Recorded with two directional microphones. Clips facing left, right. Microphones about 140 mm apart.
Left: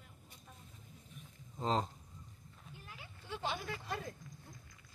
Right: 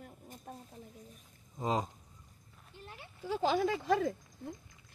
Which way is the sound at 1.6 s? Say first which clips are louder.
Right 1 dB; 10° right (ahead or behind).